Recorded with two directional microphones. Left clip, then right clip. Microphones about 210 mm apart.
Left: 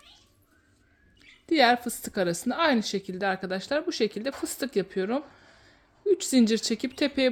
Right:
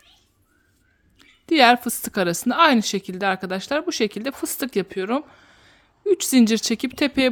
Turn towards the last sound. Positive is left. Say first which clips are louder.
# right 5 dB
turn(degrees=-25)  # may be behind; listen again after turning